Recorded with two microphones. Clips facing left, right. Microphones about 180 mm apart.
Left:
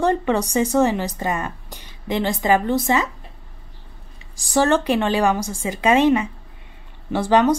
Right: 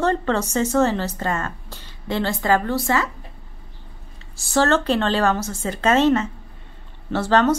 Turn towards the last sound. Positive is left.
turn(degrees=15)  # may be behind; listen again after turning